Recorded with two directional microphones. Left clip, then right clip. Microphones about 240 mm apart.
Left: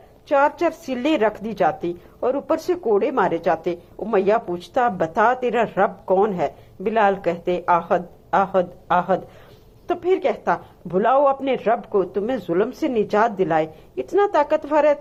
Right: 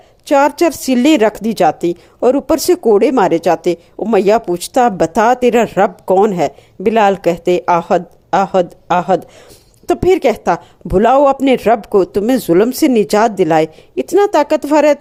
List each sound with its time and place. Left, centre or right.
0.3 s a woman's voice: right